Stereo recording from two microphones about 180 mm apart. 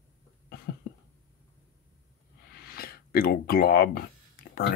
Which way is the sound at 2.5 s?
55° left (ahead or behind).